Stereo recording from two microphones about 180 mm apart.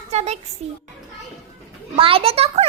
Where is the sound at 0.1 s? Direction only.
40° right (ahead or behind).